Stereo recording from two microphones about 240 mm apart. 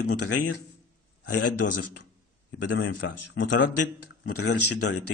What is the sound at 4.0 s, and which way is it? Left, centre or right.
Speech, left.